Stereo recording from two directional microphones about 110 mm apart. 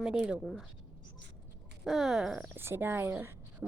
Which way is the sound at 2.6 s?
20° right (ahead or behind).